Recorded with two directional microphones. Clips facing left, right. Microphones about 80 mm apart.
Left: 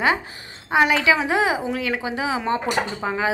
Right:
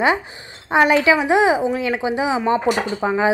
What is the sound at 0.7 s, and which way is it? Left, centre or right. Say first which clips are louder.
A woman's voice: right 3 dB; right.